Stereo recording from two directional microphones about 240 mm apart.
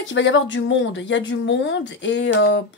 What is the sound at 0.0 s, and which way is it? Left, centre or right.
Speech, left.